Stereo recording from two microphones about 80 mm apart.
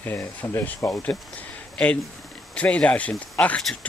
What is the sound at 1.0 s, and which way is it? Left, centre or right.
Speech, centre.